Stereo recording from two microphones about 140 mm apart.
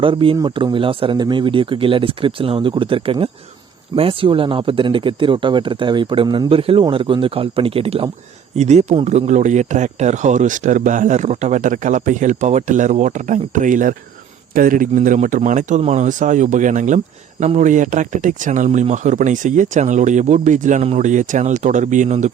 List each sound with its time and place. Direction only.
0.0 s speech: 40° right (ahead or behind)
8.5 s speech: 55° right (ahead or behind)
14.5 s a man's voice: 80° right; by 22.3 s 60° right (ahead or behind)